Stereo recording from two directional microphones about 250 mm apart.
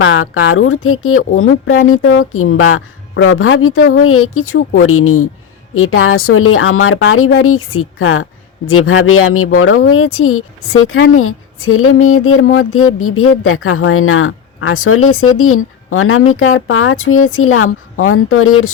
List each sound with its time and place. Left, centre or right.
0.0 s speech: left